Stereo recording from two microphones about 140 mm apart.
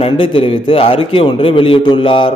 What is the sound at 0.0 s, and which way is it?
A man's voice, 40° left (ahead or behind).